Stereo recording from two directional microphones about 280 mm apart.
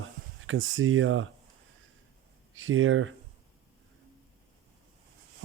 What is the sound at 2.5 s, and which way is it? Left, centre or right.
Speech, right.